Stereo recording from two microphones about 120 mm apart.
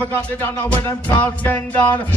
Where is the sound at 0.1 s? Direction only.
15° left (ahead or behind).